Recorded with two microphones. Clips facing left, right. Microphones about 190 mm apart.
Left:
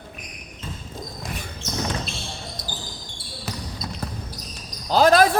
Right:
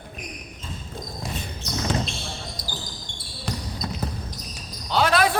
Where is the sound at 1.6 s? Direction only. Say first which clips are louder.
Left 1 dB; 25° left (ahead or behind).